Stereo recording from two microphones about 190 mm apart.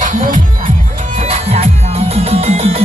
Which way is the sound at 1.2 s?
30° right (ahead or behind).